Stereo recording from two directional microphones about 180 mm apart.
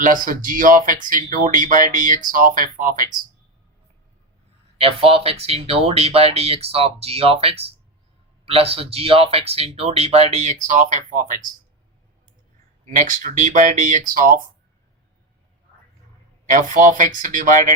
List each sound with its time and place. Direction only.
0.0 s speech: 50° right (ahead or behind)
4.8 s speech: 30° right (ahead or behind)
12.8 s speech: 45° right (ahead or behind)
16.5 s speech: 45° right (ahead or behind)